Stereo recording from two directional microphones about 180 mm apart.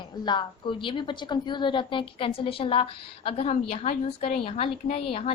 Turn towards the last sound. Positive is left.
turn(degrees=30)  # may be behind; listen again after turning